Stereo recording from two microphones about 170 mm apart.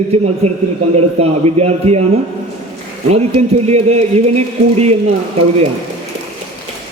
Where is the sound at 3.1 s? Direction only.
40° right (ahead or behind).